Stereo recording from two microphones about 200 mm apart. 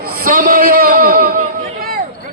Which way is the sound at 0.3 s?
45° right (ahead or behind).